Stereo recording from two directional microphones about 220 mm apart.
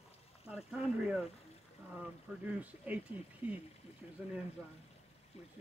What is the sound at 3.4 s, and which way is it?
Speech, 25° left (ahead or behind).